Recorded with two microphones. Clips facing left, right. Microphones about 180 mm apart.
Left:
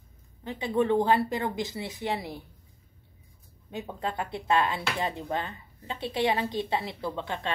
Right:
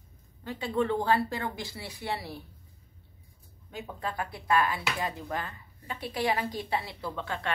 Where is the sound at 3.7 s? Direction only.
25° left (ahead or behind).